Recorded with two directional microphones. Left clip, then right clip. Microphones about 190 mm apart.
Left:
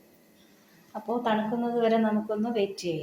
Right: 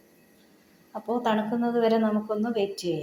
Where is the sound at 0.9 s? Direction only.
20° right (ahead or behind).